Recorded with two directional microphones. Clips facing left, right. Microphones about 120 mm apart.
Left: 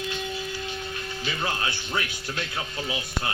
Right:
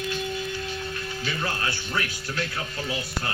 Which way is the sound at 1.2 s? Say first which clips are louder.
Left 1 dB; 15° left (ahead or behind).